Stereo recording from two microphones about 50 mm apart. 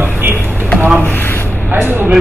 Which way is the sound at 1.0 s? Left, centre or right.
Left.